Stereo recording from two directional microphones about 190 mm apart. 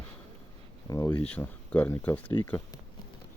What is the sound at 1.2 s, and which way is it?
Speech, 5° left (ahead or behind).